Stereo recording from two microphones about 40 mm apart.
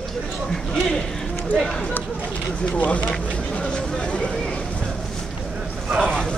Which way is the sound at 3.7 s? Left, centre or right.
Left.